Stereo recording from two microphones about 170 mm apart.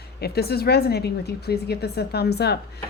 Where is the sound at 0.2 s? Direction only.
70° left (ahead or behind).